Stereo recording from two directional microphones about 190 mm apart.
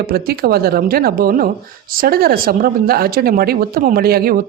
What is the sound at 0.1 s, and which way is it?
Speech, 55° right (ahead or behind).